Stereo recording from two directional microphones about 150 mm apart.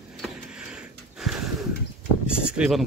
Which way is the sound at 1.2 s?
Centre (ahead or behind).